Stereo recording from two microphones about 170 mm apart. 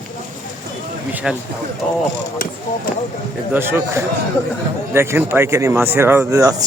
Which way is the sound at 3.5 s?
15° right (ahead or behind).